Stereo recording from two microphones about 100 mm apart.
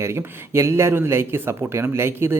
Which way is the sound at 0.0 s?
25° right (ahead or behind).